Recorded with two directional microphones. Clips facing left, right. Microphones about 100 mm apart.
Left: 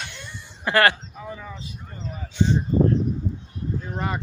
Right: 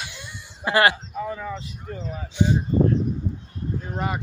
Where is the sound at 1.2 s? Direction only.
70° right (ahead or behind).